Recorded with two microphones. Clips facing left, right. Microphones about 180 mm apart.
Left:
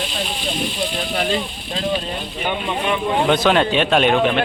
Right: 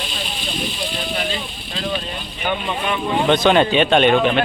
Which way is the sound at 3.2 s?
5° left (ahead or behind).